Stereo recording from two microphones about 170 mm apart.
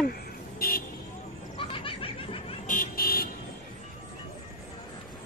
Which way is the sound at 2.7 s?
55° left (ahead or behind).